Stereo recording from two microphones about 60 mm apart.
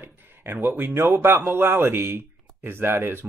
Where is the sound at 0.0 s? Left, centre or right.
Right.